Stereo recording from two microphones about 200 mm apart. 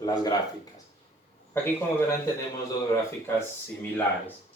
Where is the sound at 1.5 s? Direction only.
10° left (ahead or behind).